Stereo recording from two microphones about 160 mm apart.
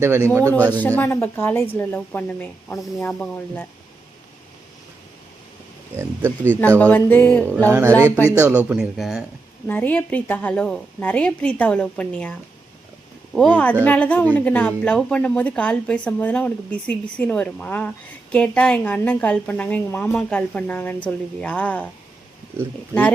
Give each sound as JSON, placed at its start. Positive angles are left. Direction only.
{"t": 0.0, "sound": "speech", "side_deg": -15}
{"t": 0.5, "sound": "a woman's voice", "side_deg": 10}
{"t": 6.0, "sound": "speech", "side_deg": -15}
{"t": 6.7, "sound": "a woman's voice", "side_deg": 10}
{"t": 7.7, "sound": "speech", "side_deg": -20}
{"t": 9.6, "sound": "a woman's voice", "side_deg": 10}
{"t": 13.3, "sound": "a woman's voice", "side_deg": 5}